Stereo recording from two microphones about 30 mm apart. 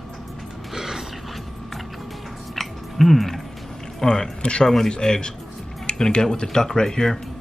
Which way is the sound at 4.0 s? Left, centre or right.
Left.